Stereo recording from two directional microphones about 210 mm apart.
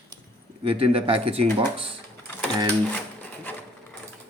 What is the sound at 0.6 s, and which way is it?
Speech, 25° right (ahead or behind).